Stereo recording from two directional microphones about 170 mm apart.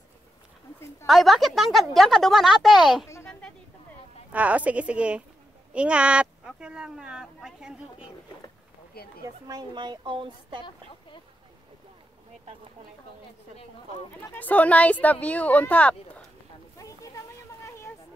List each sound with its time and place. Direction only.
1.0 s speech: centre (ahead or behind)
3.3 s a sound: 5° left (ahead or behind)
4.3 s a woman's voice: 10° right (ahead or behind)
9.0 s speech: 65° left (ahead or behind)
9.5 s speech: 25° right (ahead or behind)
14.2 s speech: 10° left (ahead or behind)
16.7 s a sound: 20° left (ahead or behind)